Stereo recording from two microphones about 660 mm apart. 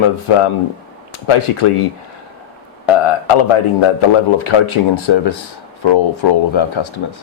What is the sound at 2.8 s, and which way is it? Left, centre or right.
A man's voice, left.